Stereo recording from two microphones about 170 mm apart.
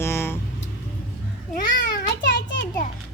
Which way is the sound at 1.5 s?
75° left (ahead or behind).